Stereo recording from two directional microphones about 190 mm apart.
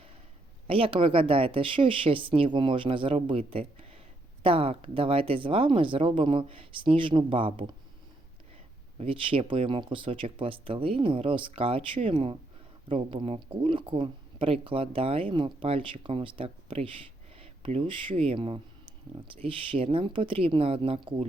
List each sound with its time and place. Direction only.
0.7 s speech: 30° right (ahead or behind)
9.0 s speech: 30° right (ahead or behind)